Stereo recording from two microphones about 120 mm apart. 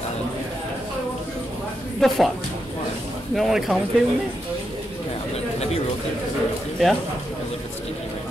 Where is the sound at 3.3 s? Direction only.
Centre (ahead or behind).